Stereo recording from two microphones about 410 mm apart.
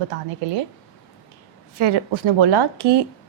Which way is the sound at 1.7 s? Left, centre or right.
Right.